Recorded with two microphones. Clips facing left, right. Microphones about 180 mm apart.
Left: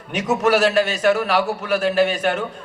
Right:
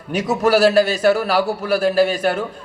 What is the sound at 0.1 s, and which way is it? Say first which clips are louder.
A man's voice: right 2 dB; 35° right (ahead or behind).